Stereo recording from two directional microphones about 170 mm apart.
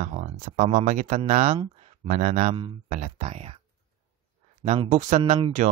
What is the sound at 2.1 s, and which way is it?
Speech, 50° right (ahead or behind).